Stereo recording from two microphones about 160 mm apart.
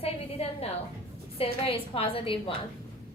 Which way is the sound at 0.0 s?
40° left (ahead or behind).